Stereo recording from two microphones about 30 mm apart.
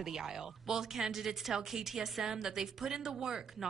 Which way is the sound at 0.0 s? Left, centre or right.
Centre.